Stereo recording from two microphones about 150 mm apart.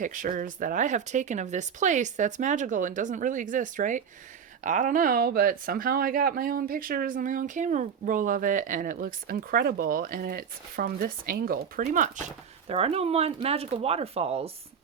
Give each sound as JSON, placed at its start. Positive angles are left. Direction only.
{"t": 0.0, "sound": "speech", "side_deg": -60}
{"t": 11.8, "sound": "speech", "side_deg": -55}
{"t": 12.6, "sound": "speech", "side_deg": -40}